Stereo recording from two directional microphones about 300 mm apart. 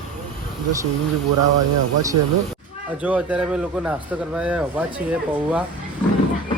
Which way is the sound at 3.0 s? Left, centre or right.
Centre.